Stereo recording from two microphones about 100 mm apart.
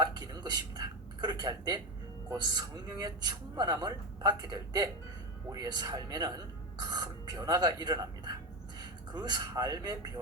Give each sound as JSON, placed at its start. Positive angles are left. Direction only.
{"t": 0.0, "sound": "a man's voice", "side_deg": -45}